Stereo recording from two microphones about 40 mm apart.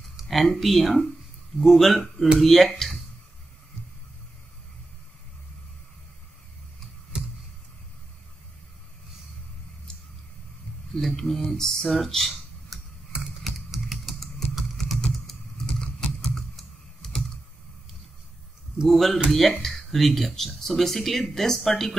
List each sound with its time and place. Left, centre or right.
0.2 s speech: centre
11.0 s speech: centre
11.8 s speech: centre
12.3 s a sound: centre
13.7 s typing: centre
15.6 s a sound: centre
16.3 s computer keyboard: centre
18.9 s speech: centre